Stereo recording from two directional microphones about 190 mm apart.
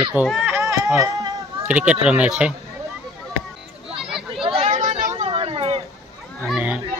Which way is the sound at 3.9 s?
Centre (ahead or behind).